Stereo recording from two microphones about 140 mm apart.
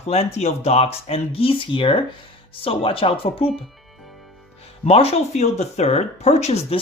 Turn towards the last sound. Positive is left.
turn(degrees=50)  # may be behind; listen again after turning